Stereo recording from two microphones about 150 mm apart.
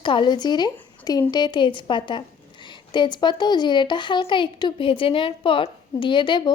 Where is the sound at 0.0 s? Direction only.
30° left (ahead or behind).